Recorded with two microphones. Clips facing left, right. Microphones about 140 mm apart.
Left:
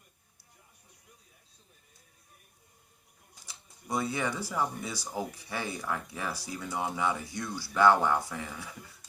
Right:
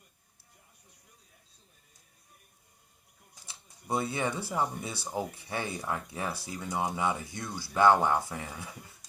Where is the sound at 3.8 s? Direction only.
25° right (ahead or behind).